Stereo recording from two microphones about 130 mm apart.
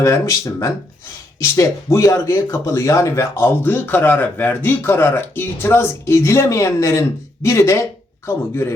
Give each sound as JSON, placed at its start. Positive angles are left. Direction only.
{"t": 0.0, "sound": "speech", "side_deg": 25}